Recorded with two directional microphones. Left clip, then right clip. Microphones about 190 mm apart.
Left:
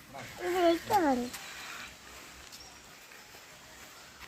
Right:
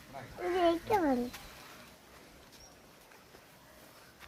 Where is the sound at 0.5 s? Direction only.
30° right (ahead or behind).